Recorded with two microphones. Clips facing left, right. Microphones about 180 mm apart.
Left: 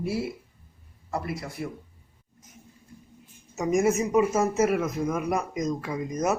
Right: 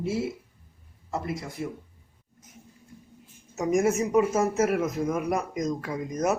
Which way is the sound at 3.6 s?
5° left (ahead or behind).